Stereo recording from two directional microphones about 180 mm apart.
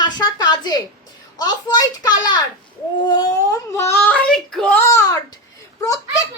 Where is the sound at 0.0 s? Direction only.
25° left (ahead or behind).